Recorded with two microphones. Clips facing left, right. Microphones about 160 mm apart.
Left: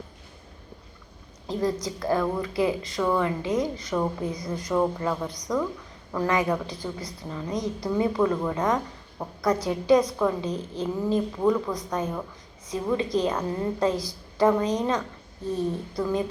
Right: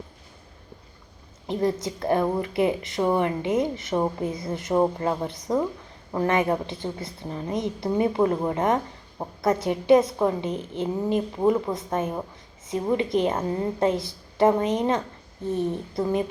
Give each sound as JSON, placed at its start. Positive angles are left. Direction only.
{"t": 1.5, "sound": "a woman's voice", "side_deg": -25}